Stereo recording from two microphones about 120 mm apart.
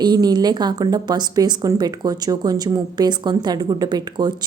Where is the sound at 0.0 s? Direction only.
35° right (ahead or behind).